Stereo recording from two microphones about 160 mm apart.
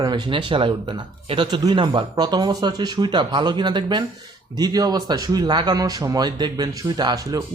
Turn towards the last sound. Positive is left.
turn(degrees=-25)  # may be behind; listen again after turning